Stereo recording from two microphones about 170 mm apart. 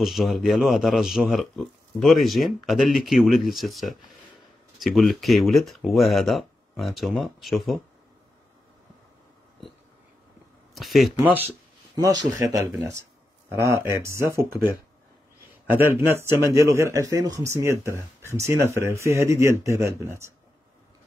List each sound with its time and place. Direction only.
0.0 s speech: centre (ahead or behind)
10.7 s speech: centre (ahead or behind)
11.2 s speech: 10° right (ahead or behind)
15.7 s speech: 15° right (ahead or behind)